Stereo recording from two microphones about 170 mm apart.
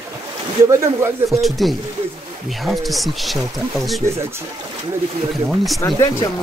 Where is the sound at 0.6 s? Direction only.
20° right (ahead or behind).